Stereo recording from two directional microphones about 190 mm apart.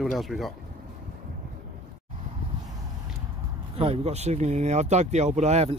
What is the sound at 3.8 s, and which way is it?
Speech, 35° right (ahead or behind).